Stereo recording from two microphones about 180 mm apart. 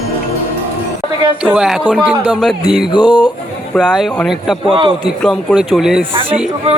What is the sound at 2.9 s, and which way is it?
Music, 25° left (ahead or behind).